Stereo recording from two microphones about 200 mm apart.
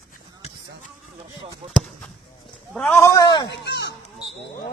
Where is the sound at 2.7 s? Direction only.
Centre (ahead or behind).